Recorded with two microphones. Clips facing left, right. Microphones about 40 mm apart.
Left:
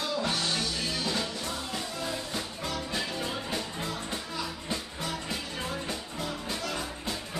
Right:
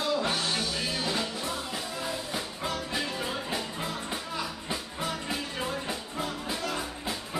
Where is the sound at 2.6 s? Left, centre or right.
Right.